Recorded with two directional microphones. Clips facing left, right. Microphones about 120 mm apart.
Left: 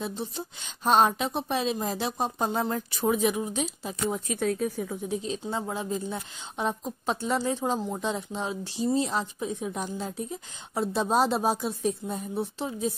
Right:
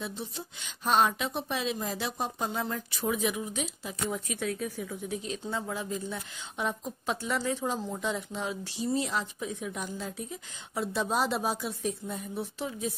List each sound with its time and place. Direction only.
0.8 s a woman's voice: 35° left (ahead or behind)
5.0 s a woman's voice: 25° left (ahead or behind)